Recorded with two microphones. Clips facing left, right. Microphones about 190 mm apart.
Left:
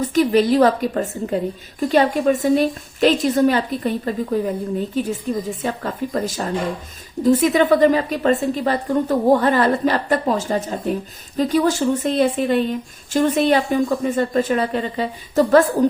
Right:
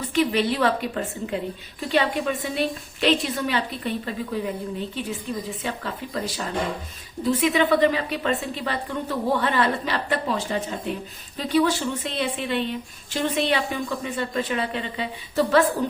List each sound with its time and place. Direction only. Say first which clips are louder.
0.0 s a woman's voice: left 6 dB; 40° left (ahead or behind)